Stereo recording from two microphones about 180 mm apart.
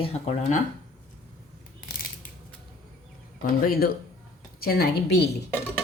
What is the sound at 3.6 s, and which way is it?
A woman's voice, 60° left (ahead or behind).